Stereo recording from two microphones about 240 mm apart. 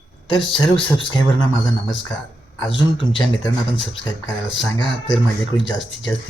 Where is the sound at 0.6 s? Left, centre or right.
Left.